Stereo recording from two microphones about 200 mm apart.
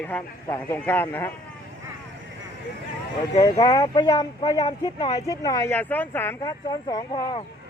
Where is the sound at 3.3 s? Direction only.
20° left (ahead or behind).